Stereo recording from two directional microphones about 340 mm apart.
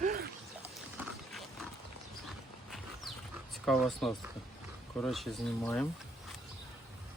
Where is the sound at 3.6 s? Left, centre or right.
Centre.